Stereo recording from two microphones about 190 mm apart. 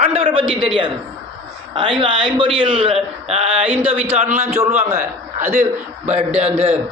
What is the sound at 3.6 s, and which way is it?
Speech, 10° right (ahead or behind).